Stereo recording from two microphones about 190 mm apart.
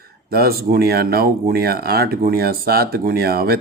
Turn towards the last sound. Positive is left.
turn(degrees=-55)  # may be behind; listen again after turning